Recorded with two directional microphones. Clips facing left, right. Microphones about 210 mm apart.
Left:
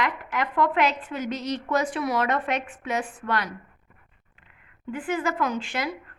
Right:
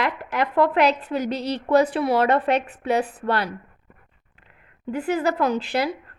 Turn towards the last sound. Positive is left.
turn(degrees=-35)  # may be behind; listen again after turning